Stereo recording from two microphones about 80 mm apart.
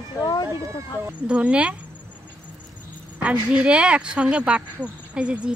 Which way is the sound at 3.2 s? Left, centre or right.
Centre.